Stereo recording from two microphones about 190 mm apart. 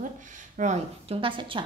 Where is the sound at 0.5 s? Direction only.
40° right (ahead or behind).